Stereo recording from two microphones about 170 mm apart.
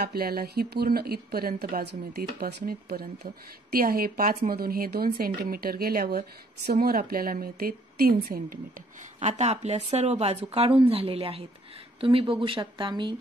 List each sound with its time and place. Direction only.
0.0 s speech: 65° right (ahead or behind)
9.2 s speech: 40° right (ahead or behind)